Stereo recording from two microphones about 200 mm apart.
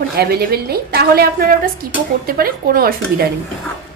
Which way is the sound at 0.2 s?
50° right (ahead or behind).